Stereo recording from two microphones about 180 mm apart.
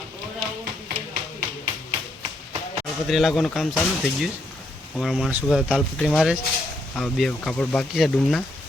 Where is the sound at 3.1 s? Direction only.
Centre (ahead or behind).